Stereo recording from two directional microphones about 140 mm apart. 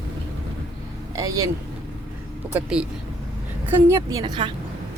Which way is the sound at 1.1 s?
25° right (ahead or behind).